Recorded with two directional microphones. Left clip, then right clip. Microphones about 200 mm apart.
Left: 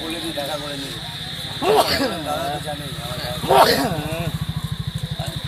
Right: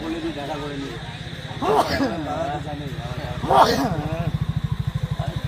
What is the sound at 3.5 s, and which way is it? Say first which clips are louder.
Speech: left 2 dB; 30° left (ahead or behind).